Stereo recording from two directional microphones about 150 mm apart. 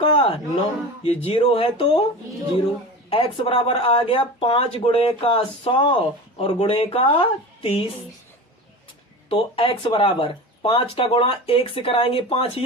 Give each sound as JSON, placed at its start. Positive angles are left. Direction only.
{"t": 0.0, "sound": "speech", "side_deg": 35}
{"t": 3.1, "sound": "speech", "side_deg": 35}
{"t": 9.3, "sound": "speech", "side_deg": 35}